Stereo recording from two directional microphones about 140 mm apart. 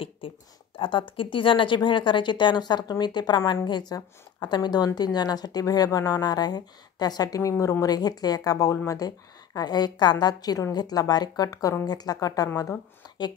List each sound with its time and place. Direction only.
0.7 s a woman's voice: 35° left (ahead or behind)